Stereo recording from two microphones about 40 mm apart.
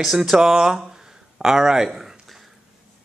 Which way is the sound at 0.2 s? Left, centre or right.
Centre.